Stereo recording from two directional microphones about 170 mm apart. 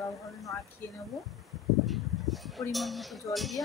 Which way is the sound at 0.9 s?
Centre (ahead or behind).